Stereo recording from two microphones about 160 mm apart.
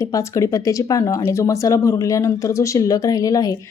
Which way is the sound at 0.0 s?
20° left (ahead or behind).